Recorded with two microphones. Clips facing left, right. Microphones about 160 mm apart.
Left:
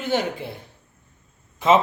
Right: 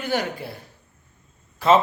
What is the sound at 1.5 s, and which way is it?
Speech, 20° left (ahead or behind).